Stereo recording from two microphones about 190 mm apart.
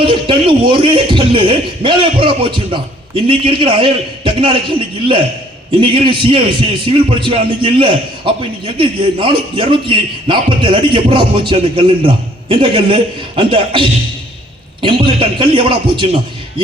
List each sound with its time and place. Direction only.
0.0 s a man's voice: 25° right (ahead or behind)
5.8 s a man's voice: 25° right (ahead or behind)